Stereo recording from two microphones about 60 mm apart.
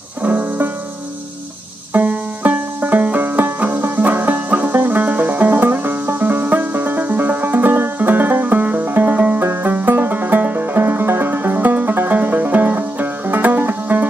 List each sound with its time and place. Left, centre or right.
0.2 s music: right
2.0 s banjo: right
3.2 s music: right